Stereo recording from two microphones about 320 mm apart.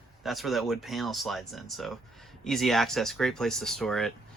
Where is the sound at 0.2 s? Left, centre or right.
Centre.